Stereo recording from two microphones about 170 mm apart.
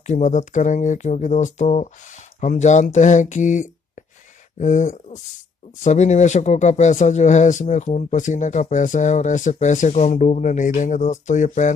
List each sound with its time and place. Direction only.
0.0 s speech: 45° left (ahead or behind)